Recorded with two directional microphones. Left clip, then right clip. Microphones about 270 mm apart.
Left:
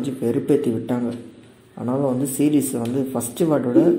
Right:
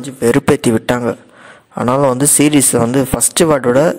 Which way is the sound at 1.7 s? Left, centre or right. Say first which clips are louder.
Right 10 dB; right.